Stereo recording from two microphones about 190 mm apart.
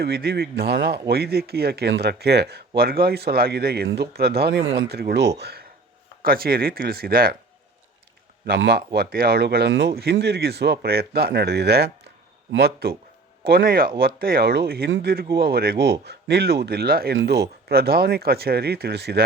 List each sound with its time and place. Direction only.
0.0 s speech: 55° right (ahead or behind)
8.4 s speech: 65° right (ahead or behind)
14.8 s a man's voice: 85° right
15.1 s speech: 55° right (ahead or behind)